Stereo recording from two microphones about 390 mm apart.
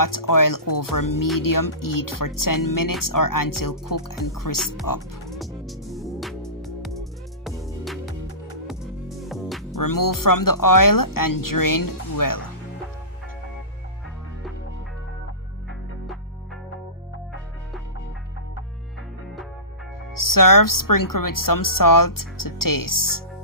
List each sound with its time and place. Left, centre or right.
0.0 s speech: left
5.3 s music: centre
9.8 s speech: left
20.1 s speech: left